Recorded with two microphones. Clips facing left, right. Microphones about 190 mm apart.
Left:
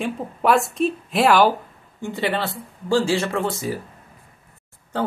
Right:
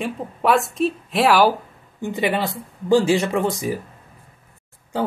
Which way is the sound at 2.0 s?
15° right (ahead or behind).